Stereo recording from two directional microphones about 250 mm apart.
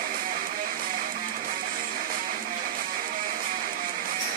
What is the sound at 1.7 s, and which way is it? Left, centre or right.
Music, right.